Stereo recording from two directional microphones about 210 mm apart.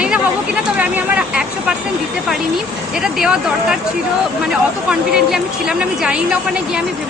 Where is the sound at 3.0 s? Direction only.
Centre (ahead or behind).